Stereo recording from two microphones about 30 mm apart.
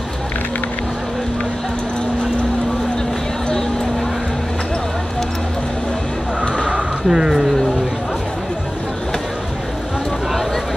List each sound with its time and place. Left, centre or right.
7.1 s speech: right